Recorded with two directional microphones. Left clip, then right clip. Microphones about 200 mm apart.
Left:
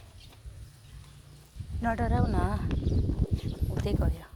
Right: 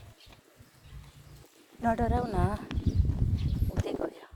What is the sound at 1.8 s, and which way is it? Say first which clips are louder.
Speech: right 1 dB; 30° right (ahead or behind).